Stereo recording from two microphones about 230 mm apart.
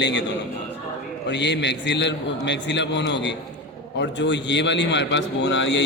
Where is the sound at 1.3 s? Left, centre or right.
Left.